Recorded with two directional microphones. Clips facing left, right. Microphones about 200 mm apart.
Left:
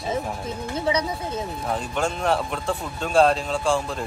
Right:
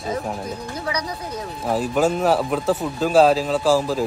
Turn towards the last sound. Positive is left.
turn(degrees=-5)  # may be behind; listen again after turning